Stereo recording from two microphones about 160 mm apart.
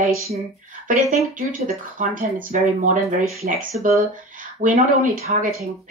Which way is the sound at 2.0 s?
55° right (ahead or behind).